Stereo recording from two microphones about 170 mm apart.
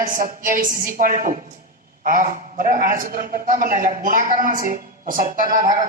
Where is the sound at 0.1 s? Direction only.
55° right (ahead or behind).